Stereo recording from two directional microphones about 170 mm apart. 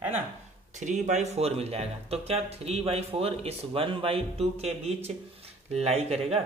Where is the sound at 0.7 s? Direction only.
45° right (ahead or behind).